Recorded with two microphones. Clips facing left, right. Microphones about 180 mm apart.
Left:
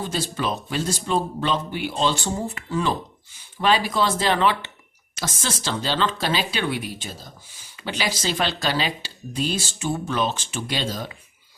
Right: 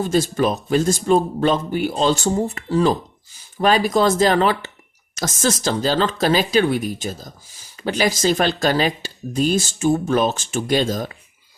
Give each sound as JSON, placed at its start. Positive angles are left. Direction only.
{"t": 0.0, "sound": "speech", "side_deg": -45}